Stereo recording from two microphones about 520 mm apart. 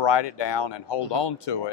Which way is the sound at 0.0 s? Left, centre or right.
Left.